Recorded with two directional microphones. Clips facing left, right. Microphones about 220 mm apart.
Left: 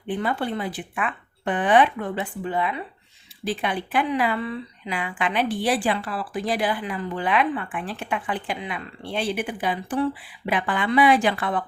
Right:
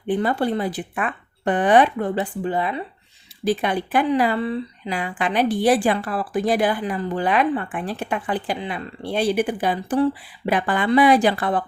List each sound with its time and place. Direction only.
0.1 s speech: 40° right (ahead or behind)